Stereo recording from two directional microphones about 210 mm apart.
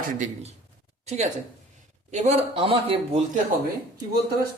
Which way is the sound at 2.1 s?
35° right (ahead or behind).